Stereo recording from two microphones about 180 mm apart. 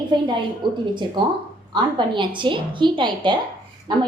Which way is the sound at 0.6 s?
25° right (ahead or behind).